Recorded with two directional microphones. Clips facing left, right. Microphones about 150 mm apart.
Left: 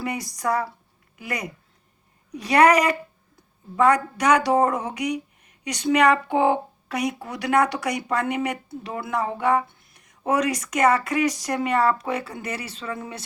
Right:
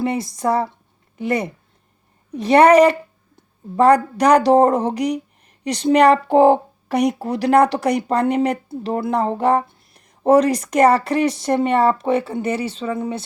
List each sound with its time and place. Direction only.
0.0 s speech: 25° right (ahead or behind)